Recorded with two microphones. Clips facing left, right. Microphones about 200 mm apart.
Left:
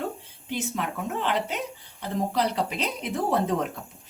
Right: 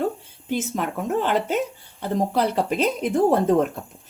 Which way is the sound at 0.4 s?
45° right (ahead or behind).